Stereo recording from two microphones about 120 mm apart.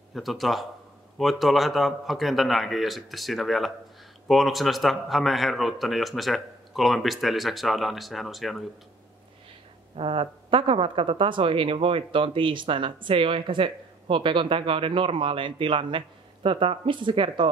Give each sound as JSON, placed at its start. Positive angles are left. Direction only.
{"t": 0.1, "sound": "a man's voice", "side_deg": 0}
{"t": 9.9, "sound": "speech", "side_deg": -50}